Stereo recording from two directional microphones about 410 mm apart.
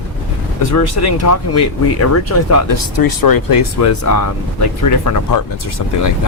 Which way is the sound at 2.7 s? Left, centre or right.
Left.